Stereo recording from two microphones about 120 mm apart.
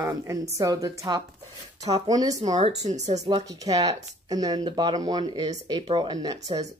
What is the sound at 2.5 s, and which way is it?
Speech, 70° right (ahead or behind).